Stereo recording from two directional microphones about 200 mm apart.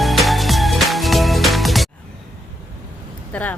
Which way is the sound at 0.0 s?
Centre (ahead or behind).